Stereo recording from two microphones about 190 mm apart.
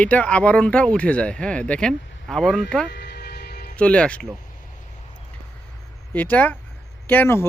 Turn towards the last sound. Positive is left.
turn(degrees=10)  # may be behind; listen again after turning